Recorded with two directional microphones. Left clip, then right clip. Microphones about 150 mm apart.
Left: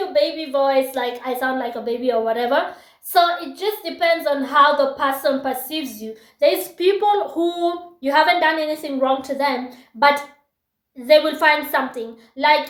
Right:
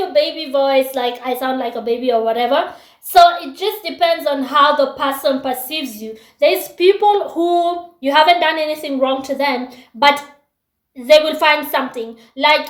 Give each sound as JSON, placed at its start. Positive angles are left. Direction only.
{"t": 0.1, "sound": "a woman's voice", "side_deg": -20}